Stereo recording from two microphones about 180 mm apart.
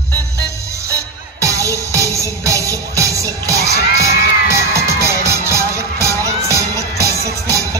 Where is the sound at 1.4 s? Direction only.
20° right (ahead or behind).